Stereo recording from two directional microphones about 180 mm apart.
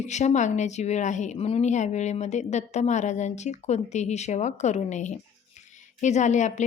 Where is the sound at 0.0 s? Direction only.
40° left (ahead or behind).